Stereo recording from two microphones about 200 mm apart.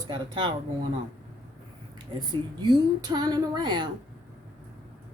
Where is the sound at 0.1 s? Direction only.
25° right (ahead or behind).